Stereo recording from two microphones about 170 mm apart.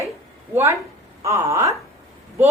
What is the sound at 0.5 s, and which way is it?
A woman's voice, 15° right (ahead or behind).